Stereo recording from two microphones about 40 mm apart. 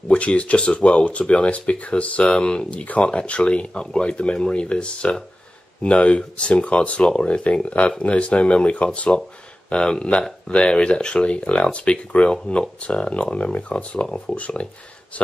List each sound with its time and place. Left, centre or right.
0.1 s speech: left